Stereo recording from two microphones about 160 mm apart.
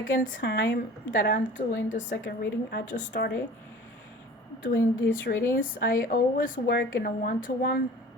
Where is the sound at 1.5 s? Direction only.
50° left (ahead or behind).